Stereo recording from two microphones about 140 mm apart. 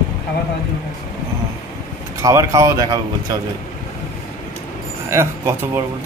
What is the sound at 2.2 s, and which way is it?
Speech, 20° right (ahead or behind).